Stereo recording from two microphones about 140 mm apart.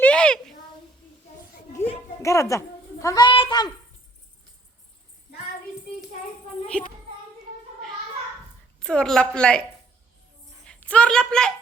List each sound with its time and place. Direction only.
0.0 s a sound: 5° left (ahead or behind)
2.2 s a woman's voice: 20° left (ahead or behind)
3.2 s speech: 35° left (ahead or behind)
6.7 s child singing: 10° left (ahead or behind)
8.8 s a woman's voice: 5° left (ahead or behind)
10.7 s a woman's voice: 10° left (ahead or behind)